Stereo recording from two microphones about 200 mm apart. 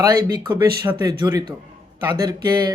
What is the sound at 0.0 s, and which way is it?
Speech, 20° right (ahead or behind).